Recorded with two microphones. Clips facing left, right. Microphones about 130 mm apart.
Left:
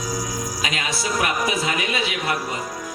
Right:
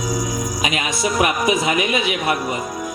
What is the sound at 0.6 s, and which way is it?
A man's voice, 20° right (ahead or behind).